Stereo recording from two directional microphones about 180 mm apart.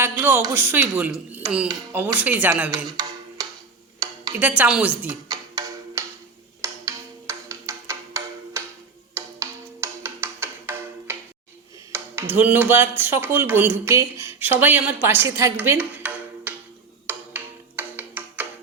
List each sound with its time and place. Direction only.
0.0 s speech: 10° right (ahead or behind)
2.7 s music: 20° right (ahead or behind)
4.0 s a sound: 20° right (ahead or behind)
4.4 s speech: 10° right (ahead or behind)
5.3 s music: 20° right (ahead or behind)
6.6 s a sound: 15° right (ahead or behind)
9.1 s music: 15° right (ahead or behind)
11.9 s speech: 10° right (ahead or behind)
17.1 s tick-tock: 10° right (ahead or behind)